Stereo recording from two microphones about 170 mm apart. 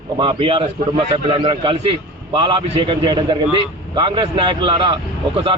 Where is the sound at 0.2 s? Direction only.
30° right (ahead or behind).